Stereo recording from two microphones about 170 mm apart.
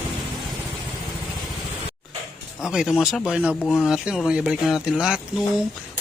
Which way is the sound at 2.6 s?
5° right (ahead or behind).